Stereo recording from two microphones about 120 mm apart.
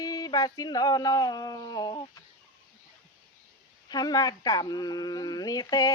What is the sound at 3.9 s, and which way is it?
Speech, 35° left (ahead or behind).